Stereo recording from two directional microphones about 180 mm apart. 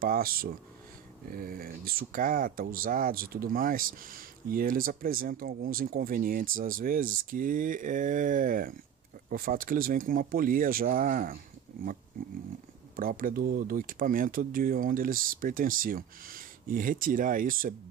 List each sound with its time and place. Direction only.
0.0 s speech: 55° right (ahead or behind)